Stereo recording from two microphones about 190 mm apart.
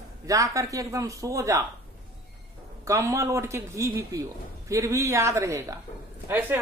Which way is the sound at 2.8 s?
15° right (ahead or behind).